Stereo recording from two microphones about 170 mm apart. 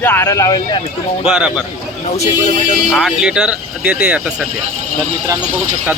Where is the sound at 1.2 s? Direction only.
5° right (ahead or behind).